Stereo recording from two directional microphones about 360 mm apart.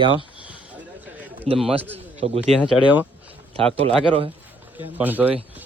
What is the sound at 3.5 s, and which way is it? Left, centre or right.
Speech, centre.